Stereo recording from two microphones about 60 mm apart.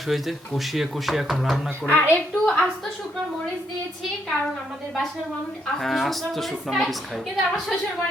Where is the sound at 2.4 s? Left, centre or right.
Centre.